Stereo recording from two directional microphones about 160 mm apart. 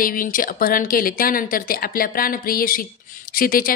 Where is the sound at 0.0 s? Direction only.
60° left (ahead or behind).